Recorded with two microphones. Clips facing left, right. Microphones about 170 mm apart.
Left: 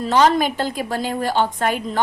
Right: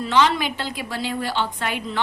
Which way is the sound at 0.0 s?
40° left (ahead or behind).